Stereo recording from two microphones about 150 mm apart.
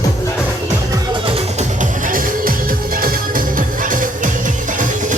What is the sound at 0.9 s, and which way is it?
Music, 35° right (ahead or behind).